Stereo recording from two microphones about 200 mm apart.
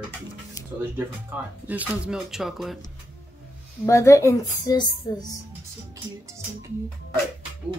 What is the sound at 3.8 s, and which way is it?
Speech, 15° left (ahead or behind).